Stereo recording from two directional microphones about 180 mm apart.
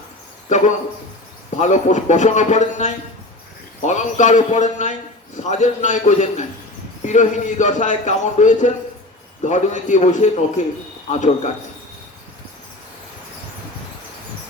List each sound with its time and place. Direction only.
0.4 s speech: 40° left (ahead or behind)